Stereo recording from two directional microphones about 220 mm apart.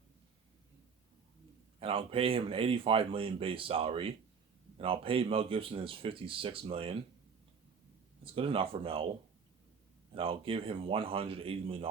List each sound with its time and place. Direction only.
1.8 s speech: 25° right (ahead or behind)
8.2 s speech: 25° right (ahead or behind)
10.2 s speech: 25° right (ahead or behind)